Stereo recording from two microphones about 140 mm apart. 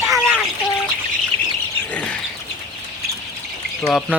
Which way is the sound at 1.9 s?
10° left (ahead or behind).